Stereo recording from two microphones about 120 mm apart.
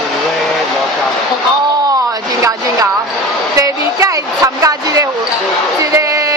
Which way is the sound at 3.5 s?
25° right (ahead or behind).